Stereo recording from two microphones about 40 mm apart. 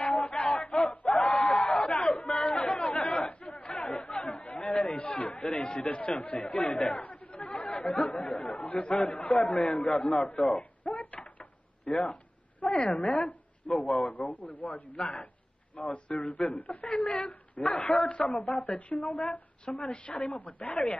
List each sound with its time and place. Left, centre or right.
0.0 s a sound: left
2.4 s chatter: left
4.9 s speech: left
9.6 s a man's voice: centre
10.8 s a sound: left
12.1 s a woman's voice: left